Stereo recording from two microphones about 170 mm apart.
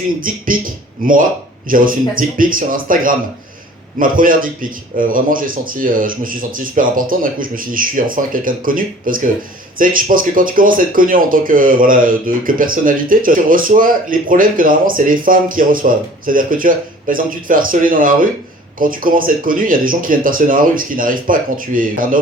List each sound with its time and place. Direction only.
0.2 s speech: 55° right (ahead or behind)